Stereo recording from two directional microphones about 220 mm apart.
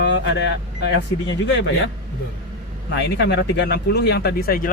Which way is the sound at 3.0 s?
50° left (ahead or behind).